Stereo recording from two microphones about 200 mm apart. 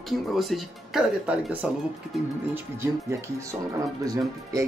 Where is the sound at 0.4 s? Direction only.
Centre (ahead or behind).